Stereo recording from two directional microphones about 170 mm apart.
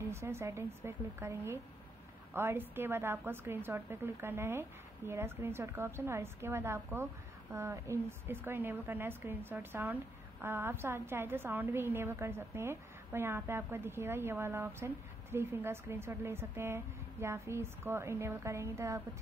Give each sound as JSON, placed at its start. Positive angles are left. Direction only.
{"t": 0.1, "sound": "a woman's voice", "side_deg": -15}